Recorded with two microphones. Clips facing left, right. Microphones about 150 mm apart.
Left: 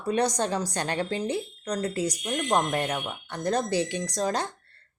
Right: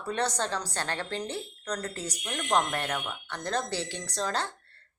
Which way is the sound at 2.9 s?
25° left (ahead or behind).